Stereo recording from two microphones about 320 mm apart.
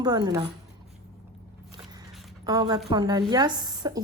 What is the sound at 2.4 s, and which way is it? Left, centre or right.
A woman's voice, centre.